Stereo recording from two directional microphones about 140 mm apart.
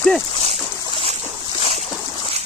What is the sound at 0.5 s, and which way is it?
Boat, 45° right (ahead or behind).